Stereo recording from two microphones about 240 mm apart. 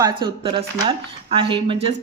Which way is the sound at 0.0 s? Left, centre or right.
Centre.